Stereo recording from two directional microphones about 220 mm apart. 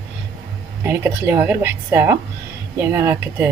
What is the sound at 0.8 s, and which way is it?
Speech, 10° right (ahead or behind).